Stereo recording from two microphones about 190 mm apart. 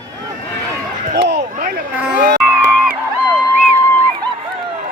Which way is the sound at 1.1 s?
60° right (ahead or behind).